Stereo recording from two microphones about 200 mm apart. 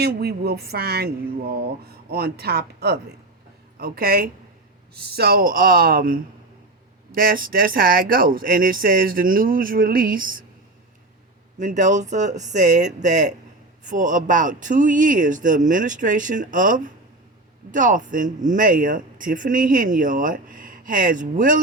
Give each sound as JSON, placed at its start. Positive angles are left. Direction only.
{"t": 0.0, "sound": "speech", "side_deg": -55}
{"t": 11.6, "sound": "speech", "side_deg": -35}